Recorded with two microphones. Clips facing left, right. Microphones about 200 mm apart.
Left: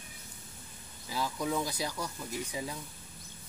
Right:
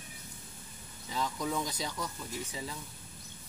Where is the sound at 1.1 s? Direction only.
10° left (ahead or behind).